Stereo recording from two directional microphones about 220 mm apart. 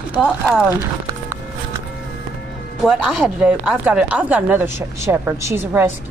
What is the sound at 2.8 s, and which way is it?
Speech, 5° right (ahead or behind).